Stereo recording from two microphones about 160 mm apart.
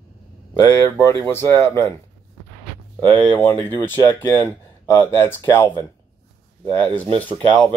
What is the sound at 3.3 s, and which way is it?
Speech, 15° left (ahead or behind).